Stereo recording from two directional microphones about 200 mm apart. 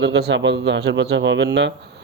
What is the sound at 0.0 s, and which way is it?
Speech, 60° right (ahead or behind).